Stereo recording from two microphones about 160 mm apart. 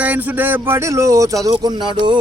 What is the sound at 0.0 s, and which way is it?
Speech, 10° right (ahead or behind).